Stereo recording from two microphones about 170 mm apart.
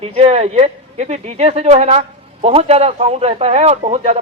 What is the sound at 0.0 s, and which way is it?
Speech, 35° right (ahead or behind).